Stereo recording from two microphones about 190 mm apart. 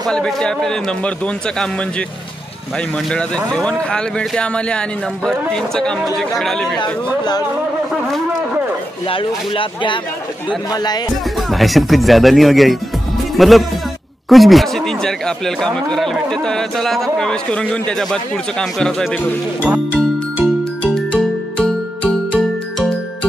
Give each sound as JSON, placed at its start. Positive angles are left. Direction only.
{"t": 0.1, "sound": "speech", "side_deg": 5}
{"t": 3.4, "sound": "speech", "side_deg": 5}
{"t": 6.8, "sound": "speech", "side_deg": 20}
{"t": 9.0, "sound": "speech", "side_deg": 30}
{"t": 11.3, "sound": "speech", "side_deg": 0}
{"t": 20.8, "sound": "music", "side_deg": 5}